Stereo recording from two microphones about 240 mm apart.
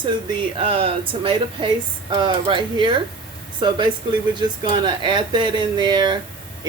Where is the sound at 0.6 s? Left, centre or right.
Right.